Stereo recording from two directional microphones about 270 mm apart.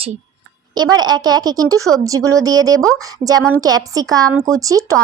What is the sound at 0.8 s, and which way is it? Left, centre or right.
Speech, centre.